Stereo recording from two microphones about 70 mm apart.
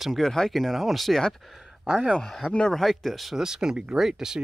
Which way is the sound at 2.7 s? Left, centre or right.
Centre.